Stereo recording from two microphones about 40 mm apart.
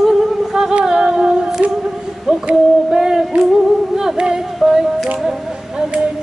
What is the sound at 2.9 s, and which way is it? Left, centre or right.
Music, centre.